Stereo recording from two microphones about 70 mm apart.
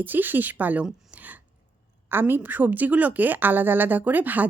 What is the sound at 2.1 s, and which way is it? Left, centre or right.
A woman's voice, right.